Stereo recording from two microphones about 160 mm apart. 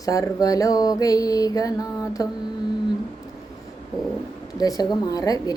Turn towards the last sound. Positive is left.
turn(degrees=25)  # may be behind; listen again after turning